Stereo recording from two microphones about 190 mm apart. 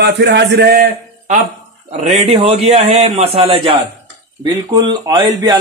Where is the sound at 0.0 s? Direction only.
65° right (ahead or behind); by 1.4 s 45° right (ahead or behind).